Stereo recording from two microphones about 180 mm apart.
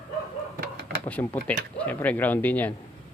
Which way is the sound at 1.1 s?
10° left (ahead or behind).